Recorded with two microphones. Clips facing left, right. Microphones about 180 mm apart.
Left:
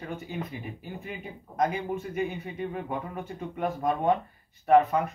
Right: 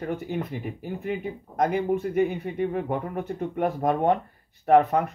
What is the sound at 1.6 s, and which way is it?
Speech, 65° right (ahead or behind).